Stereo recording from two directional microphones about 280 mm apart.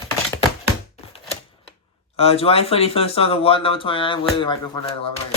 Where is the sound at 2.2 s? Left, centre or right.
Left.